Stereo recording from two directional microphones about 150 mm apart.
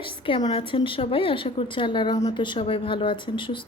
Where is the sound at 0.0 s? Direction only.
35° left (ahead or behind).